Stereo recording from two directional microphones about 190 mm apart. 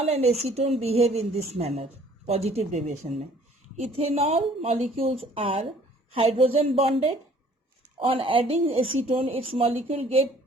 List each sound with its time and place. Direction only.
0.1 s a woman's voice: 35° right (ahead or behind)